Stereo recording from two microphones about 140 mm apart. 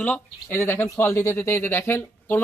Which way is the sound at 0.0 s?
10° left (ahead or behind).